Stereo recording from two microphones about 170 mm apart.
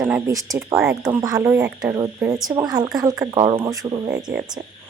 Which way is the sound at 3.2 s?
25° right (ahead or behind).